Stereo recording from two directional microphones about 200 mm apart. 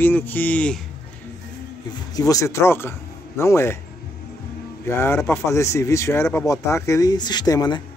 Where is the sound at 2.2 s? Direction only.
15° left (ahead or behind).